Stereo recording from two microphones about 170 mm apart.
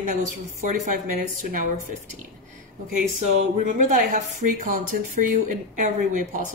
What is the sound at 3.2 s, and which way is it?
Speech, 45° right (ahead or behind).